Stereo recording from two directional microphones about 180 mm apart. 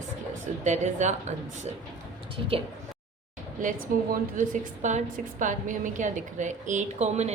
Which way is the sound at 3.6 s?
45° right (ahead or behind).